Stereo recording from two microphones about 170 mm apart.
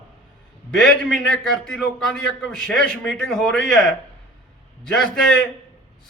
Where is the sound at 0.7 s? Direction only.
5° left (ahead or behind).